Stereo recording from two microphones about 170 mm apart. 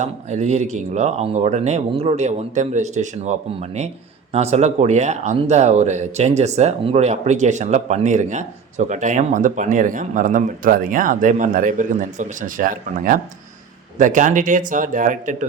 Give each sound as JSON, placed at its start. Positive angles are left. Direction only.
{"t": 0.0, "sound": "speech", "side_deg": -45}